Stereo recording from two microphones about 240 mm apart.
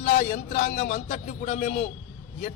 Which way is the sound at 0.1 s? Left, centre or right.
Left.